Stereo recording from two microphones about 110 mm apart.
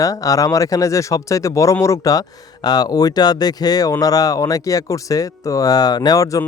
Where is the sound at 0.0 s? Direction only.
30° left (ahead or behind).